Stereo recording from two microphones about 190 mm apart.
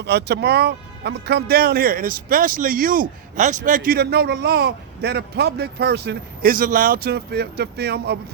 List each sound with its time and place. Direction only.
0.0 s speech: 60° right (ahead or behind)